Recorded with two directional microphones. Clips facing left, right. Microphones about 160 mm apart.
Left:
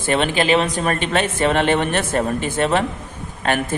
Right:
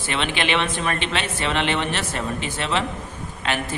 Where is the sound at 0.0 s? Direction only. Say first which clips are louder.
Left 6 dB; 45° left (ahead or behind).